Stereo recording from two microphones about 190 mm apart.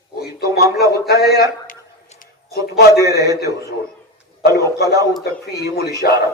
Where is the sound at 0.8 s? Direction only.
55° left (ahead or behind).